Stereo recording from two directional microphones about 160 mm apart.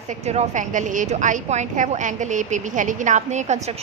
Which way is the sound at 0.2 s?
40° right (ahead or behind).